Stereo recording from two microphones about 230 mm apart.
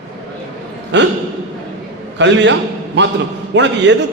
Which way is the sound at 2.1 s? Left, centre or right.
Right.